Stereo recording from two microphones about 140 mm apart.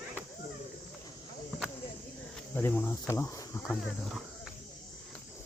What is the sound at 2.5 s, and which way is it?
Cricket, 15° left (ahead or behind).